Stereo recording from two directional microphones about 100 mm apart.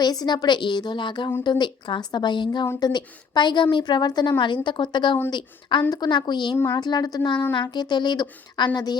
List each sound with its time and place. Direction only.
0.0 s a woman's voice: 40° left (ahead or behind)